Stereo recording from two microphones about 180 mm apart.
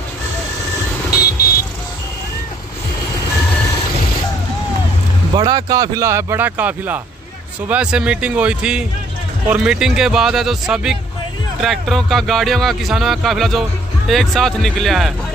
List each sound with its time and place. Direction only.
5.3 s speech: 20° right (ahead or behind); by 15.1 s centre (ahead or behind)